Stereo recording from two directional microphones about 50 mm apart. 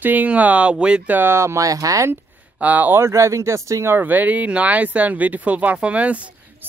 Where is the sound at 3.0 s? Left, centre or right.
Right.